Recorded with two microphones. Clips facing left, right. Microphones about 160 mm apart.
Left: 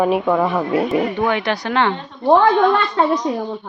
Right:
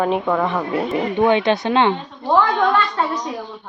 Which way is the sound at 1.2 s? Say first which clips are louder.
Right 3 dB; 20° right (ahead or behind).